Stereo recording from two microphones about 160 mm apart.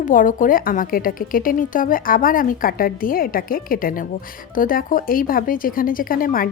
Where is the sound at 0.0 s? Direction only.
55° left (ahead or behind).